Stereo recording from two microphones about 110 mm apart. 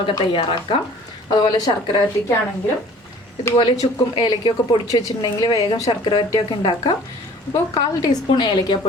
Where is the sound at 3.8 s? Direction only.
75° left (ahead or behind).